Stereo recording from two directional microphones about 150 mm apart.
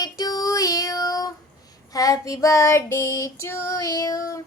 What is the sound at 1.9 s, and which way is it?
Female singing, 25° left (ahead or behind).